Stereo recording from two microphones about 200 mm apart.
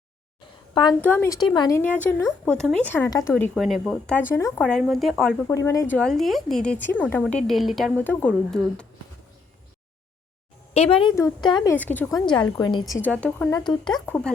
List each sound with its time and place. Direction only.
0.7 s a woman's voice: 20° left (ahead or behind)
1.0 s speech: 10° left (ahead or behind)
1.8 s speech: 10° left (ahead or behind)
3.5 s a woman's voice: centre (ahead or behind)
5.5 s a woman's voice: 15° left (ahead or behind)
10.8 s speech: 30° left (ahead or behind)
11.7 s speech: 10° left (ahead or behind)
12.1 s speech: 25° left (ahead or behind)
12.9 s speech: 5° left (ahead or behind)
13.5 s speech: 20° left (ahead or behind)